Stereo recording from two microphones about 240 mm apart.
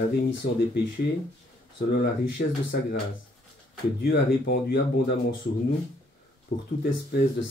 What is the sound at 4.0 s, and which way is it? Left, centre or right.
Speech, left.